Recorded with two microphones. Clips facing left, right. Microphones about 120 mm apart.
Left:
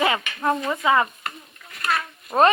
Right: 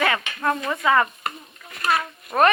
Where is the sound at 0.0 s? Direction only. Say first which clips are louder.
Left 1 dB; 20° left (ahead or behind).